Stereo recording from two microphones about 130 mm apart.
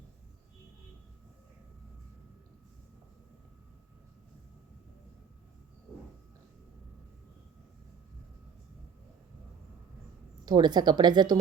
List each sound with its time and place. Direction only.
10.4 s speech: 35° right (ahead or behind)